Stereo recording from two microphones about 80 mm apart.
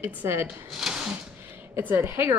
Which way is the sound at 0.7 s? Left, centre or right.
Centre.